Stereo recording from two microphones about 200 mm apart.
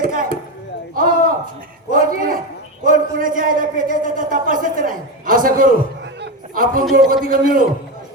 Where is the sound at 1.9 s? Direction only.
45° right (ahead or behind).